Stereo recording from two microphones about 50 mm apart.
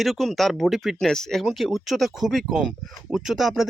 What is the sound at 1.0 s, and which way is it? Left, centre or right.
Speech, centre.